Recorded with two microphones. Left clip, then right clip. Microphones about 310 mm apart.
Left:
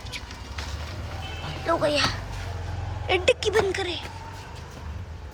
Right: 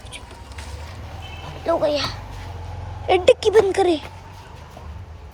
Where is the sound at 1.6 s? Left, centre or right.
Centre.